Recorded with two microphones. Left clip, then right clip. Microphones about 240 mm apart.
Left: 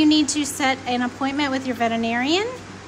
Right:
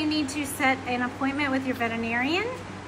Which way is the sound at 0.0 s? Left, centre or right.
Left.